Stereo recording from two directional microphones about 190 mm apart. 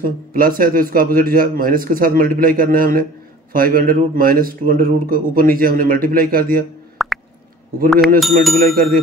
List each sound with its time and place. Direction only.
0.3 s speech: 50° right (ahead or behind)
7.0 s plop: centre (ahead or behind)
8.2 s a sound: centre (ahead or behind)
8.5 s speech: 50° right (ahead or behind)